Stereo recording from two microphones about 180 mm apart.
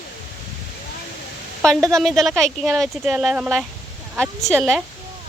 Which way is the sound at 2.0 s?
Centre (ahead or behind).